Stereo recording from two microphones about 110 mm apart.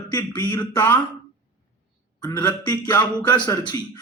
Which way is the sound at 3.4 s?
35° left (ahead or behind).